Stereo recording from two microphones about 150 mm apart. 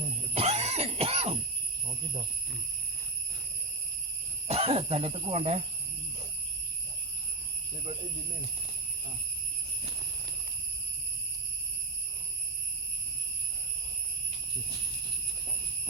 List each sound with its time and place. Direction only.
0.3 s cough: 45° right (ahead or behind)
4.4 s speech: 40° right (ahead or behind)